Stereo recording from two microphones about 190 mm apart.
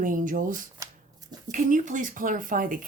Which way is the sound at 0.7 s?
15° right (ahead or behind).